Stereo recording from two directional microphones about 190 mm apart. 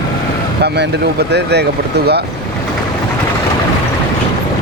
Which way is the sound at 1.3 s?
60° right (ahead or behind).